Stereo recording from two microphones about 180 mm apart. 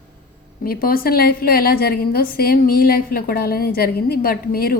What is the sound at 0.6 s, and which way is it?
A woman's voice, 55° left (ahead or behind).